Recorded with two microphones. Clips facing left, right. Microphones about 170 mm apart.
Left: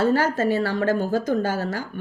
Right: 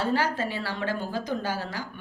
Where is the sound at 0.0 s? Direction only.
45° left (ahead or behind).